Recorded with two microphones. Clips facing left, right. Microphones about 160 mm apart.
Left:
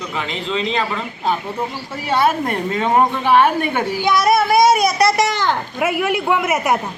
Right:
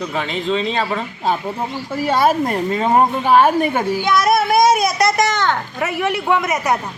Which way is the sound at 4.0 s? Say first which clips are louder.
Left 2 dB; centre (ahead or behind).